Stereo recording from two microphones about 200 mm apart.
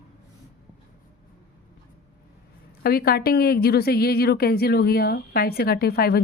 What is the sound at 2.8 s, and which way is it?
A woman's voice, 50° left (ahead or behind).